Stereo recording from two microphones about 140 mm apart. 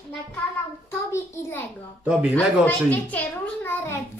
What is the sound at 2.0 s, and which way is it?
Speech, 10° right (ahead or behind).